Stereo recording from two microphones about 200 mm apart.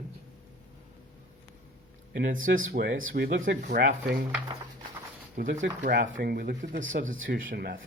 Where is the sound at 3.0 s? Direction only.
65° right (ahead or behind); by 3.8 s 40° right (ahead or behind).